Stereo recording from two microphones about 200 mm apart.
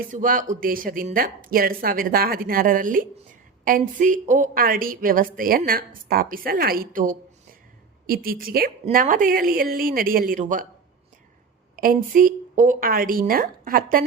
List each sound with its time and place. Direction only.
0.1 s a woman's voice: 40° right (ahead or behind)
11.8 s a woman's voice: 45° right (ahead or behind)